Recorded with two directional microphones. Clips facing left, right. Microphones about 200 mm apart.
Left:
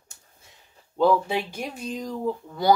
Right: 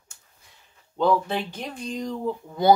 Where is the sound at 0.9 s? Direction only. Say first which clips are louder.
Left 1 dB; 10° left (ahead or behind).